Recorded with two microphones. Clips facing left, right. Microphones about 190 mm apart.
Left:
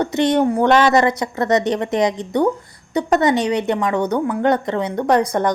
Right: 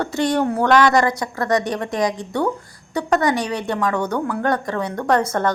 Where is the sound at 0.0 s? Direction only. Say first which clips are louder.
Left 3 dB; 20° left (ahead or behind).